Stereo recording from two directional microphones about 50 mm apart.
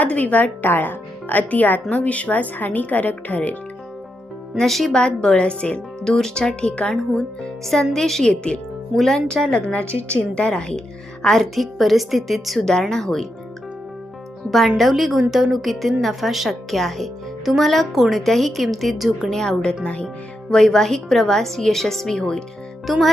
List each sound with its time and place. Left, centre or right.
0.0 s speech: left
4.5 s a woman's voice: centre
4.9 s speech: centre
6.1 s a woman's voice: centre
6.5 s a woman's voice: left
7.6 s a woman's voice: centre
8.3 s a woman's voice: left; by 12.5 s centre
12.5 s a woman's voice: centre
14.5 s a woman's voice: centre
19.3 s a woman's voice: centre
19.8 s speech: left
20.5 s a woman's voice: centre
22.9 s a woman's voice: centre